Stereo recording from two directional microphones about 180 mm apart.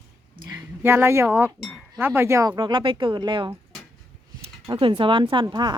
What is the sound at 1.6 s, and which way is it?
Speech, centre (ahead or behind).